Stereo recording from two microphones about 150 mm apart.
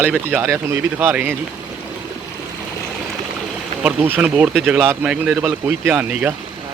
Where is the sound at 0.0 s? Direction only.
10° right (ahead or behind).